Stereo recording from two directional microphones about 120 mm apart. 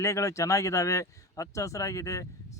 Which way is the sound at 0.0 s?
25° left (ahead or behind).